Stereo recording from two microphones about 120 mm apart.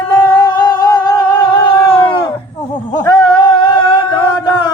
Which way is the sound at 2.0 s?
45° left (ahead or behind).